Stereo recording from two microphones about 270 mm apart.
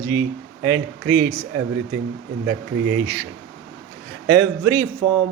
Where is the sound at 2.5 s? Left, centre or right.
Right.